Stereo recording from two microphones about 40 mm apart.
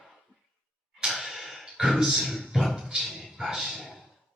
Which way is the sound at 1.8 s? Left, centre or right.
Right.